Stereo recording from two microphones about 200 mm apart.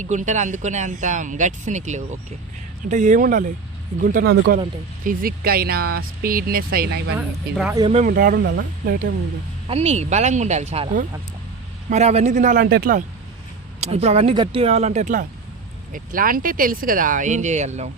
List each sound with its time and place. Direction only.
0.0 s speech: 35° right (ahead or behind)
9.6 s speech: 35° right (ahead or behind)
13.8 s speech: 30° right (ahead or behind)